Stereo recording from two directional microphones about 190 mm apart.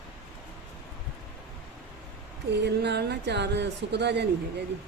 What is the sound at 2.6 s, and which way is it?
Speech, 60° right (ahead or behind).